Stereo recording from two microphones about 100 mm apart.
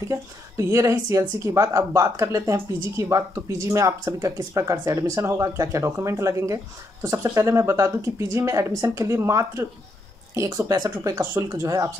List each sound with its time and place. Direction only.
0.1 s speech: 30° right (ahead or behind)
11.1 s speech: 25° right (ahead or behind)